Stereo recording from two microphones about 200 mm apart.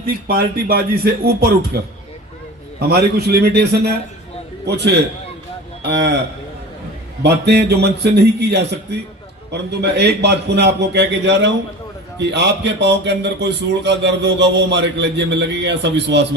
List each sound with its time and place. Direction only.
0.3 s speech: 50° right (ahead or behind)
2.9 s a man's voice: 55° right (ahead or behind)
7.2 s a man's voice: 55° right (ahead or behind)